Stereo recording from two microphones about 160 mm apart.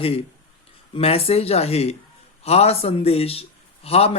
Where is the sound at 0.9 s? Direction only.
40° left (ahead or behind).